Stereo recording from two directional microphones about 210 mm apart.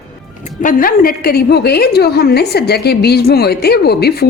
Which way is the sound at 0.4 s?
40° left (ahead or behind).